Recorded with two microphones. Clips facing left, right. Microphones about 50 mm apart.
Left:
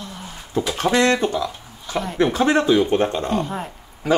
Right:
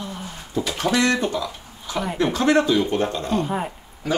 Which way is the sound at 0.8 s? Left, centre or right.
Left.